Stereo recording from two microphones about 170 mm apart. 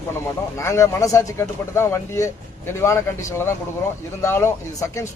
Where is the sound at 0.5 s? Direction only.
15° left (ahead or behind).